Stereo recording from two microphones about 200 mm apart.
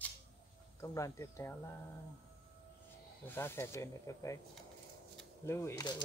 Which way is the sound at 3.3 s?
10° left (ahead or behind).